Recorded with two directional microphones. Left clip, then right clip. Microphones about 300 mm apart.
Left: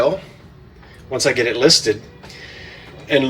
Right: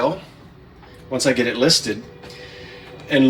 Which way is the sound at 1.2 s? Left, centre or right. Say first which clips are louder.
Left 3 dB; centre.